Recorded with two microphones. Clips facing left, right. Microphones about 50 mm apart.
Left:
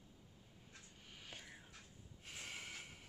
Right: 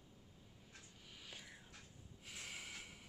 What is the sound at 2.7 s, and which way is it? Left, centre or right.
Music, centre.